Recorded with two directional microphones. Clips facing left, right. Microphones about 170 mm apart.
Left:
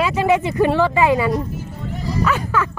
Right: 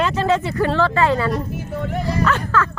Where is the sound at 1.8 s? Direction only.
65° right (ahead or behind).